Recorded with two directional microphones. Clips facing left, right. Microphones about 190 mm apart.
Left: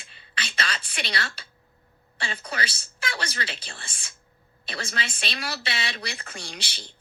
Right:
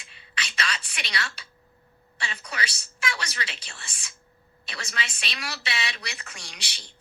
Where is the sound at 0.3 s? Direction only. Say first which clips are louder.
Left 1 dB; 30° left (ahead or behind).